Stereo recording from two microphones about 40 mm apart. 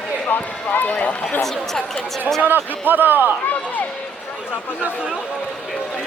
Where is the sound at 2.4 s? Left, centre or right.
Right.